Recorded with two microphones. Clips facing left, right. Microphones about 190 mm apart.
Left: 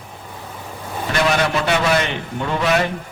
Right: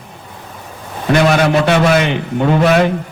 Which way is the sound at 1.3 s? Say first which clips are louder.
Right 6 dB; 55° right (ahead or behind).